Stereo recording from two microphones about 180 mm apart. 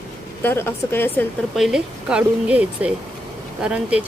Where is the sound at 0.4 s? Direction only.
10° left (ahead or behind).